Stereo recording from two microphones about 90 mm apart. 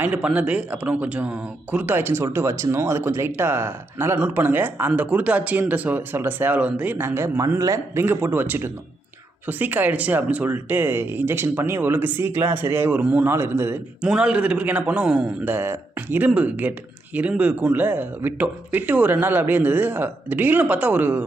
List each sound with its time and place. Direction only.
0.0 s speech: 10° right (ahead or behind)
2.2 s speech: 30° right (ahead or behind); by 13.3 s 15° right (ahead or behind)
13.3 s speech: 30° right (ahead or behind)
14.1 s speech: 10° right (ahead or behind)
15.5 s speech: 25° right (ahead or behind)